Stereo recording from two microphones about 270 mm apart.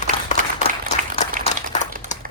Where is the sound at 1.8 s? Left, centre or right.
Right.